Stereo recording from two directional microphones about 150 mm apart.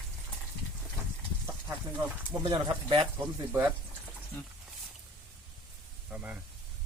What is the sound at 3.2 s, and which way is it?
Speech, 10° right (ahead or behind).